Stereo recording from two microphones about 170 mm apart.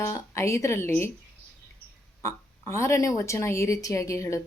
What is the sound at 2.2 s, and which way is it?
Speech, 15° left (ahead or behind).